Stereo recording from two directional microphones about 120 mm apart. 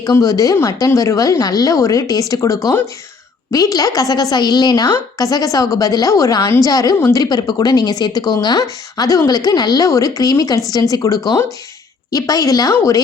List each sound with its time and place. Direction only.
0.0 s a woman's voice: 30° left (ahead or behind)